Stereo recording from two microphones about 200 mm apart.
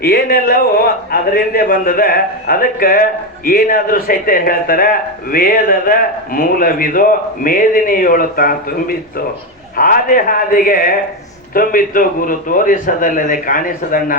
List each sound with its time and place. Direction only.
0.0 s a man's voice: 50° left (ahead or behind)